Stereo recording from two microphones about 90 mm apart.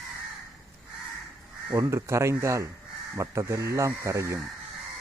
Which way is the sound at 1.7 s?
30° right (ahead or behind).